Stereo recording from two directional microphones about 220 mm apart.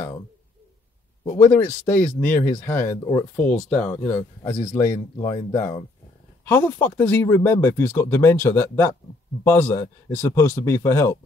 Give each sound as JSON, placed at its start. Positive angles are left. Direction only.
{"t": 1.2, "sound": "speech", "side_deg": 10}